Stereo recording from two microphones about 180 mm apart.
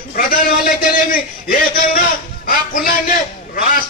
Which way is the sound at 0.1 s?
50° left (ahead or behind).